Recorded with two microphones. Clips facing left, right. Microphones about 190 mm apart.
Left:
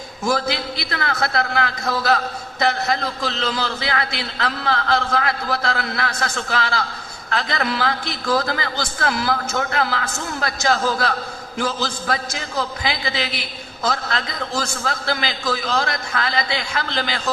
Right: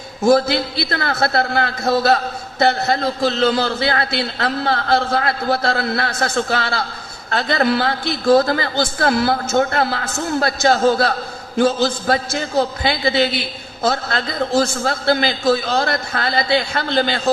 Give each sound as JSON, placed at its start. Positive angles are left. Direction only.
{"t": 0.3, "sound": "a man's voice", "side_deg": -30}